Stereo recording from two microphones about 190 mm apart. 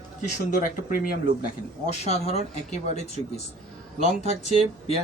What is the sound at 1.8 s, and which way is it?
Speech, 35° left (ahead or behind).